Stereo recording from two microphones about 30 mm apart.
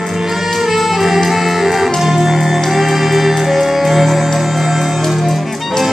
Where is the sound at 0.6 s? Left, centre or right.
Centre.